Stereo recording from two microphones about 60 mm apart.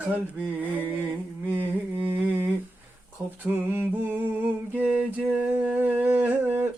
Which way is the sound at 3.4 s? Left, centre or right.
Right.